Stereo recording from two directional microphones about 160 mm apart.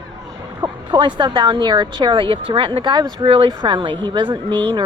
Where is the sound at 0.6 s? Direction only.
30° right (ahead or behind).